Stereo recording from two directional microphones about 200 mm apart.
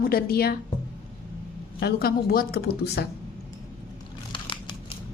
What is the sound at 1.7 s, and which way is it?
A woman's voice, 50° left (ahead or behind).